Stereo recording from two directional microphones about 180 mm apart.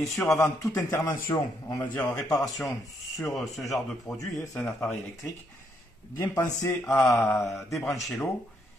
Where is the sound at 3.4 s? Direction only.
Centre (ahead or behind).